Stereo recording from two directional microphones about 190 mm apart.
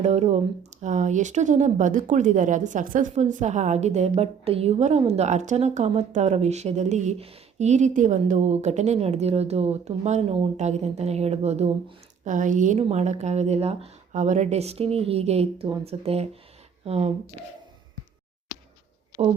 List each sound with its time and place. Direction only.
0.0 s speech: 35° right (ahead or behind)